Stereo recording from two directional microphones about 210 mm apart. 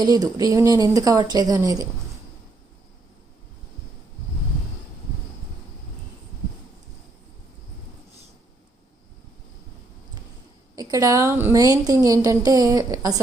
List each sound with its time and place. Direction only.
0.0 s a woman's voice: 20° right (ahead or behind)
10.8 s a woman's voice: 20° right (ahead or behind)